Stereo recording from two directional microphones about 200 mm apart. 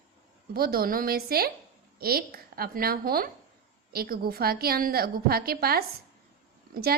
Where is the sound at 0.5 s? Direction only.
50° right (ahead or behind).